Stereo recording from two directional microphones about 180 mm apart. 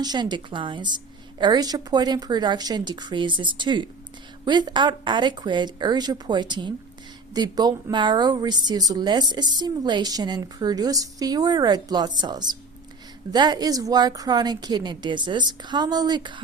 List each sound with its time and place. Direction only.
0.0 s speech: 25° right (ahead or behind)